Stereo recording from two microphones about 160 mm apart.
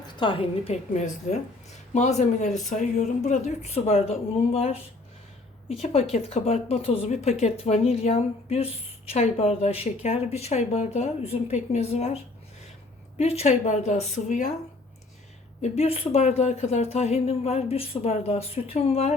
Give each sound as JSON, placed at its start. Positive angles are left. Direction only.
{"t": 0.2, "sound": "a woman's voice", "side_deg": 30}
{"t": 15.6, "sound": "a woman's voice", "side_deg": 40}